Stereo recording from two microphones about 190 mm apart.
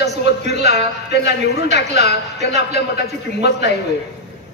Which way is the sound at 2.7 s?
60° left (ahead or behind).